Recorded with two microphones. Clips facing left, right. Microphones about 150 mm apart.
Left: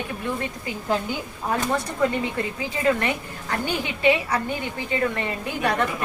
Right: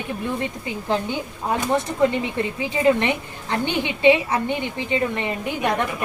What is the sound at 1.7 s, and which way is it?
A woman's voice, 20° right (ahead or behind).